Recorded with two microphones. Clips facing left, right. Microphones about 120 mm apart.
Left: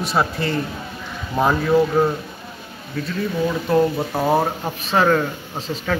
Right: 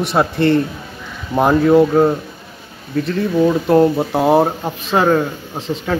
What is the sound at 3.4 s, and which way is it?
Speech, 25° right (ahead or behind).